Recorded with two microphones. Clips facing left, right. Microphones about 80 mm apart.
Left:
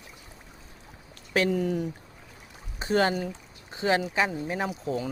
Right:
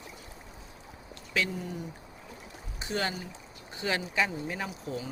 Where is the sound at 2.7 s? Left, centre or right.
Left.